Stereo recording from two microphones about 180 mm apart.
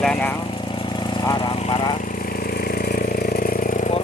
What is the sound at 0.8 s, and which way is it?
Vehicle, 30° left (ahead or behind).